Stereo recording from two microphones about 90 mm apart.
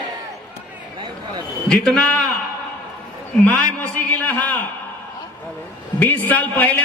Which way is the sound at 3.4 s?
20° left (ahead or behind).